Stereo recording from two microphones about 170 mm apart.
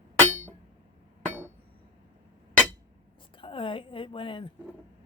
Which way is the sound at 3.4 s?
30° left (ahead or behind).